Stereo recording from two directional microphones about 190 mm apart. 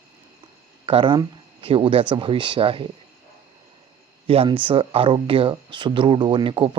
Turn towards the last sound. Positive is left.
turn(degrees=-25)  # may be behind; listen again after turning